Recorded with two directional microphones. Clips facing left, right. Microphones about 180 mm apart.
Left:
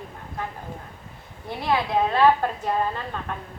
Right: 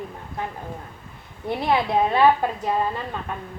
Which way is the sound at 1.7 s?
15° right (ahead or behind).